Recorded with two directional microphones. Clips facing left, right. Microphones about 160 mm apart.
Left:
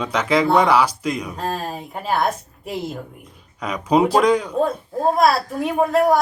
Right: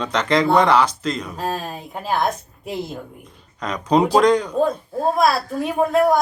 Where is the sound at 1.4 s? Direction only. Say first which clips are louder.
Even; centre (ahead or behind).